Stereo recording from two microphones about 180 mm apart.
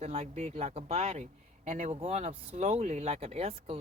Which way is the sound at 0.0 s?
35° right (ahead or behind).